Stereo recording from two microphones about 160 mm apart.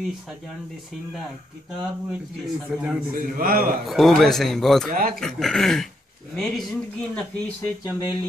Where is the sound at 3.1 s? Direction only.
65° right (ahead or behind).